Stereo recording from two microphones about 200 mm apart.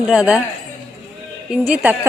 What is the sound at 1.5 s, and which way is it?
Speech, 5° right (ahead or behind).